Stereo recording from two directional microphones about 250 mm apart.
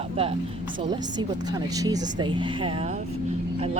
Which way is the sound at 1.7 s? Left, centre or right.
Centre.